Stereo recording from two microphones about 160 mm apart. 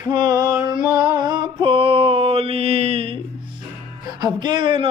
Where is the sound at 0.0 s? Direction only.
25° right (ahead or behind).